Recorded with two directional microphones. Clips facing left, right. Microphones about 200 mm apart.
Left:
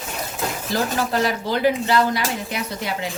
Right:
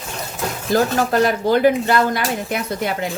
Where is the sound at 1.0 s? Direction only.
50° right (ahead or behind).